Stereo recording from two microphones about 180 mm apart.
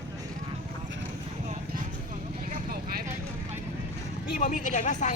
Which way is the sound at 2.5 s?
55° right (ahead or behind).